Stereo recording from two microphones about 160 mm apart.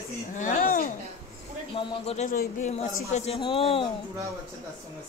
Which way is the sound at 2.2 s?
50° left (ahead or behind).